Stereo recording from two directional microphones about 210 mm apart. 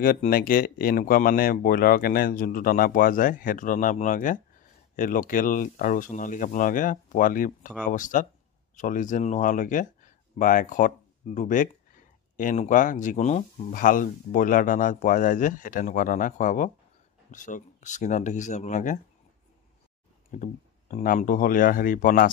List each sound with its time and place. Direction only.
0.0 s speech: 45° left (ahead or behind)
20.9 s speech: 40° left (ahead or behind)